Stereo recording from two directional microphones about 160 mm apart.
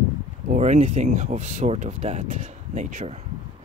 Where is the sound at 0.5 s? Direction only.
45° right (ahead or behind).